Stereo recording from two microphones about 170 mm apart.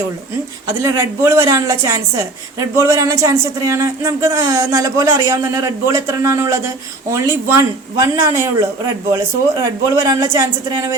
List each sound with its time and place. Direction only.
0.8 s a woman's voice: 20° right (ahead or behind)